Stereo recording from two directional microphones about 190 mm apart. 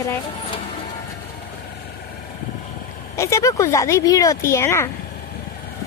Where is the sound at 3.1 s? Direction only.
15° left (ahead or behind).